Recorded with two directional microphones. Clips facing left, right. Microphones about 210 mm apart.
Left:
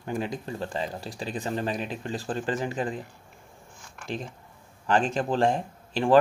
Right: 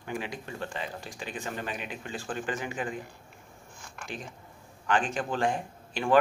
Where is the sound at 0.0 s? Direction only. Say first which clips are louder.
Left 5 dB; 40° left (ahead or behind).